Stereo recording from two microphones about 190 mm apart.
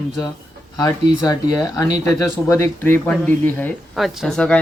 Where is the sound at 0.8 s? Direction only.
20° left (ahead or behind).